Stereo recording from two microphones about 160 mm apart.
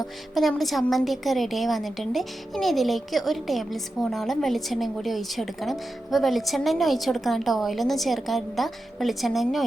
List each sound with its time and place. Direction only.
0.0 s a woman's voice: centre (ahead or behind)